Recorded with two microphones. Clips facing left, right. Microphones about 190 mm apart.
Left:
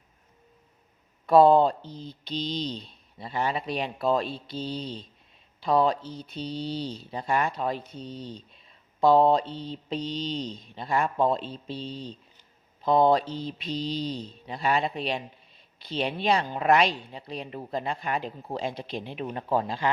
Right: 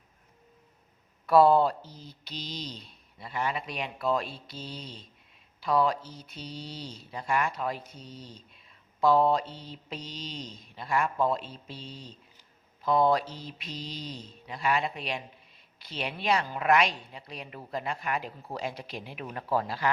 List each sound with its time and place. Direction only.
1.3 s a man's voice: 25° left (ahead or behind)
1.8 s speech: 5° right (ahead or behind)
2.2 s a man's voice: 30° left (ahead or behind)
12.8 s a sound: 30° left (ahead or behind)
13.3 s a man's voice: 30° left (ahead or behind)